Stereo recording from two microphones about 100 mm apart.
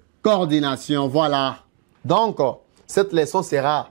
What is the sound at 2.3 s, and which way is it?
Speech, 25° right (ahead or behind).